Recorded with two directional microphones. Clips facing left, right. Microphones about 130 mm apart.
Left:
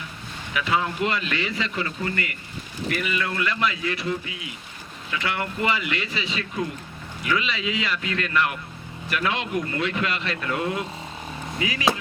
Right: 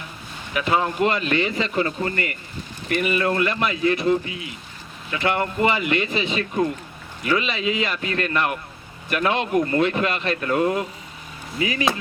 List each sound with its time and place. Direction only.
0.5 s speech: 40° right (ahead or behind)
5.7 s speech: 50° right (ahead or behind)